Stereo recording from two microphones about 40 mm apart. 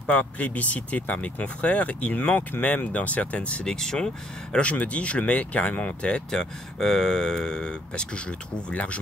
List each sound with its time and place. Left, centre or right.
0.1 s speech: left
3.6 s speech: centre
4.6 s speech: left
6.3 s speech: centre; by 9.0 s left